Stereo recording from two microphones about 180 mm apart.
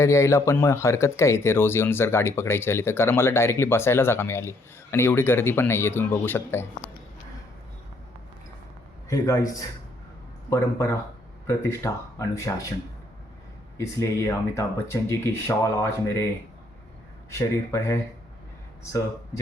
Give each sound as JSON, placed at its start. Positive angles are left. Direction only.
{"t": 0.0, "sound": "speech", "side_deg": 15}
{"t": 9.0, "sound": "speech", "side_deg": 15}
{"t": 13.7, "sound": "speech", "side_deg": 15}
{"t": 17.3, "sound": "speech", "side_deg": 15}